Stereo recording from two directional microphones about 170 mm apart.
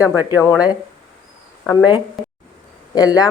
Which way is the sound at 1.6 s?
20° left (ahead or behind).